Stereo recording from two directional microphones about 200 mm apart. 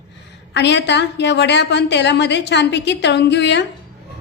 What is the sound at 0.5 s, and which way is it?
A woman's voice, 60° left (ahead or behind).